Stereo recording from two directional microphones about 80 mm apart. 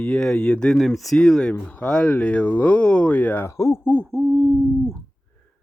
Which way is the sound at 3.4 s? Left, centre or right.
Left.